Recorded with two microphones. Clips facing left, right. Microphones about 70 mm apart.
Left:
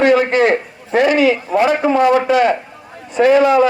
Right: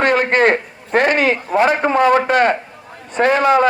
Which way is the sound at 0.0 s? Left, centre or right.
Right.